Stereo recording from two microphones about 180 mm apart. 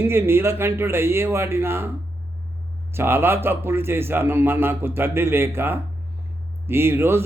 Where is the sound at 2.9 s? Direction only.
10° right (ahead or behind).